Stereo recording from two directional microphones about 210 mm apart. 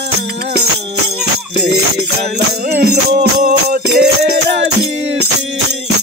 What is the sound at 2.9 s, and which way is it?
Music, 50° right (ahead or behind).